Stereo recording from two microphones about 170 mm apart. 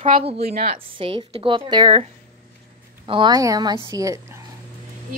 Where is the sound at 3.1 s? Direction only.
25° right (ahead or behind).